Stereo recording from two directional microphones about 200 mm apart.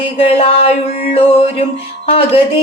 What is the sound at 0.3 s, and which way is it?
Speech, 30° left (ahead or behind).